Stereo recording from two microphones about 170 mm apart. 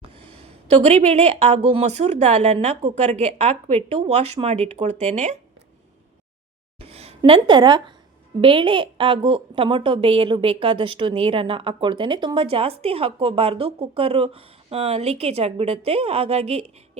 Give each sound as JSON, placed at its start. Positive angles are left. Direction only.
{"t": 0.0, "sound": "a woman's voice", "side_deg": -35}
{"t": 6.7, "sound": "a sound", "side_deg": -35}
{"t": 7.2, "sound": "a woman's voice", "side_deg": -30}